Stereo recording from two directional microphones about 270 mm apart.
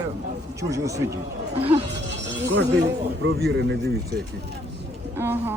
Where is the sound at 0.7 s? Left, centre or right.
Centre.